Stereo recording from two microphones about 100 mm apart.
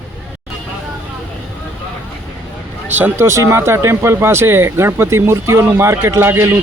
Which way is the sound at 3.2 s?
30° right (ahead or behind).